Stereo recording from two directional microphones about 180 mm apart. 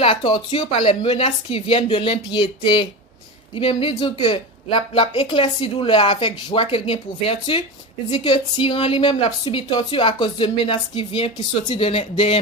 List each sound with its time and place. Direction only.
0.0 s a woman's voice: 30° left (ahead or behind)